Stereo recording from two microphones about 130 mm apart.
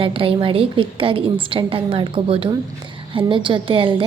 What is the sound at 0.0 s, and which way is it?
A woman's voice, 45° right (ahead or behind).